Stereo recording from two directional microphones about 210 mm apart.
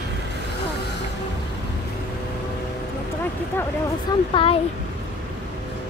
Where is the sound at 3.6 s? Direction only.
20° left (ahead or behind).